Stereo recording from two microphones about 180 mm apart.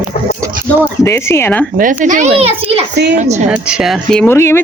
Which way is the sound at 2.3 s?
35° right (ahead or behind).